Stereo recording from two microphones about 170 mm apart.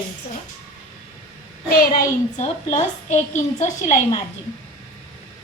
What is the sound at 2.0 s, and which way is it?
A woman's voice, 45° left (ahead or behind).